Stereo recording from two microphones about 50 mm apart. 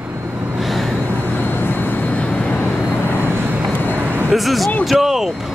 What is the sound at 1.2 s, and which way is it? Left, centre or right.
Vehicle, left.